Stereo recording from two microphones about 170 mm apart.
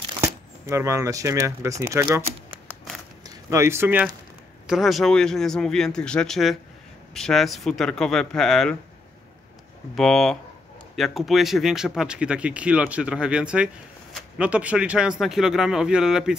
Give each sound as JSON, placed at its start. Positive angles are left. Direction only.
{"t": 0.2, "sound": "speech", "side_deg": -15}
{"t": 4.6, "sound": "speech", "side_deg": 0}
{"t": 9.9, "sound": "speech", "side_deg": 5}